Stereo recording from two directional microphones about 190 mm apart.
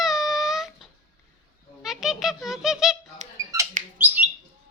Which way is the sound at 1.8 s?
Centre (ahead or behind).